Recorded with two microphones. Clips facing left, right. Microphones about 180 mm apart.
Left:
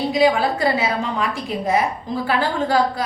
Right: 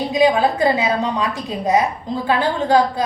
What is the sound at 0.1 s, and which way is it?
A woman's voice, 20° right (ahead or behind).